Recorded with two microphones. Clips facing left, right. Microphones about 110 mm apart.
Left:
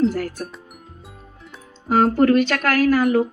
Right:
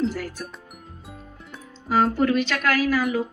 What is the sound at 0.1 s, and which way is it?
Speech, 50° left (ahead or behind).